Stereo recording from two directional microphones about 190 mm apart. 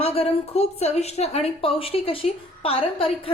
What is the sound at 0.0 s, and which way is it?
A woman's voice, 30° left (ahead or behind).